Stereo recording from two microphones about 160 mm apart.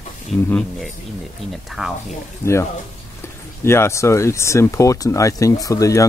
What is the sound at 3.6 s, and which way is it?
Speech, 15° left (ahead or behind).